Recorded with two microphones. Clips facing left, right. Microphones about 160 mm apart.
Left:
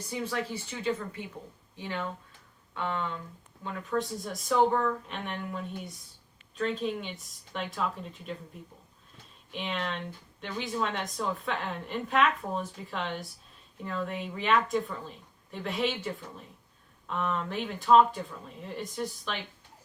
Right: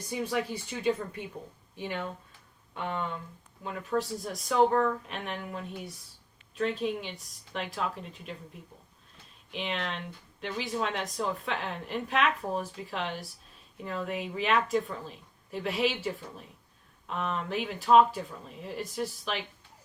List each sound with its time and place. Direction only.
0.1 s speech: 15° right (ahead or behind)
3.6 s a woman's voice: 5° right (ahead or behind)
9.5 s a woman's voice: centre (ahead or behind)
17.1 s a woman's voice: centre (ahead or behind)